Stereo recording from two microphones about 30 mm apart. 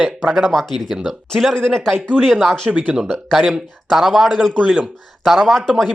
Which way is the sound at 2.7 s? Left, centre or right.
Right.